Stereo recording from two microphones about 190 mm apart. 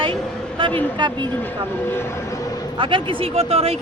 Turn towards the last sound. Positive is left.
turn(degrees=-30)  # may be behind; listen again after turning